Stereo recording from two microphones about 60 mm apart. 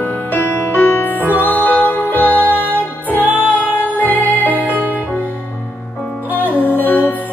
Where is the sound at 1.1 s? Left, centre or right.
Right.